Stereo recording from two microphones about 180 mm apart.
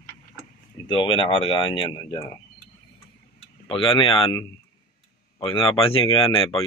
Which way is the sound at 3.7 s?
30° left (ahead or behind).